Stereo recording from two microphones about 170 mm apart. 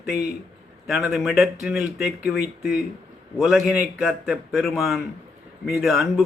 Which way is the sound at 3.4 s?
5° right (ahead or behind).